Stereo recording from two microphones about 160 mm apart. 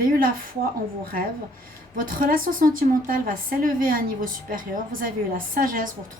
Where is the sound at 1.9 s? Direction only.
60° right (ahead or behind).